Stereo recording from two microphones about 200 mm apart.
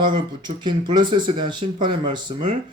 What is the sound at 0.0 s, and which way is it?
A man's voice, 25° right (ahead or behind).